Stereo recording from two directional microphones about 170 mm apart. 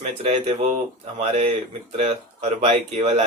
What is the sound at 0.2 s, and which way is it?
Speech, 35° right (ahead or behind).